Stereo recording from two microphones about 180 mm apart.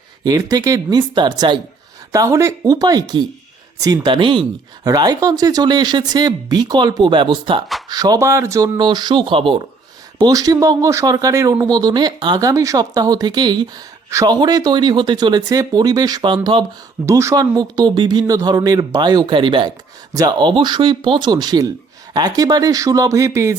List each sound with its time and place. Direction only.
0.3 s speech: 20° right (ahead or behind)
17.1 s speech: 15° right (ahead or behind)